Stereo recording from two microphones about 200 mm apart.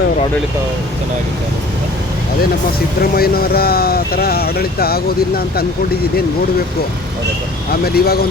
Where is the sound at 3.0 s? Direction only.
50° left (ahead or behind).